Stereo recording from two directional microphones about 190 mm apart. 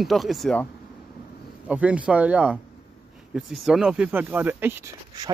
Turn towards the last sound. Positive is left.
turn(degrees=-10)  # may be behind; listen again after turning